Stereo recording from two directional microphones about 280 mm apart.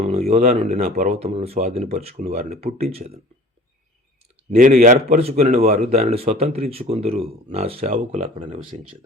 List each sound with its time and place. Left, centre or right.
0.0 s speech: right
4.5 s speech: right